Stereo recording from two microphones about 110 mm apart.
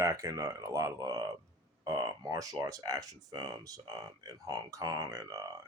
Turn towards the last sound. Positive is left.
turn(degrees=-30)  # may be behind; listen again after turning